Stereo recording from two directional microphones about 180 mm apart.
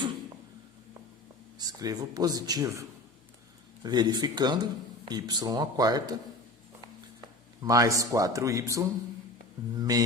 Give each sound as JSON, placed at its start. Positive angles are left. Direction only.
{"t": 1.5, "sound": "speech", "side_deg": -20}
{"t": 3.8, "sound": "speech", "side_deg": -20}
{"t": 7.6, "sound": "speech", "side_deg": -20}